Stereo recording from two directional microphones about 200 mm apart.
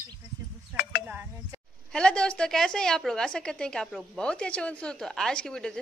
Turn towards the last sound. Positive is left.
turn(degrees=5)  # may be behind; listen again after turning